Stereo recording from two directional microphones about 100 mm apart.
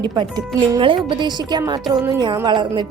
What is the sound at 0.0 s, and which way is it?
Speech, 45° right (ahead or behind).